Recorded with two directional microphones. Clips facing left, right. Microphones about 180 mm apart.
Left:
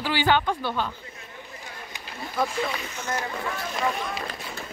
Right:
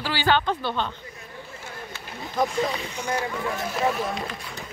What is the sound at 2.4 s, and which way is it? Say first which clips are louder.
Speech: right 3 dB; 15° right (ahead or behind).